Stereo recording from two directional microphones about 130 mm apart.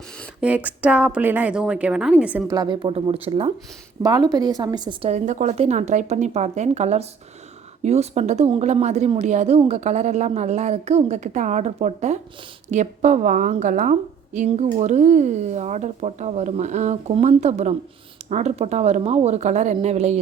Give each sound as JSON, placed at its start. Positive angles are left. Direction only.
{"t": 0.4, "sound": "a woman's voice", "side_deg": -10}
{"t": 2.5, "sound": "speech", "side_deg": -35}
{"t": 4.0, "sound": "speech", "side_deg": -30}
{"t": 5.0, "sound": "a woman's voice", "side_deg": -65}
{"t": 5.5, "sound": "a woman's voice", "side_deg": -60}
{"t": 14.3, "sound": "speech", "side_deg": -55}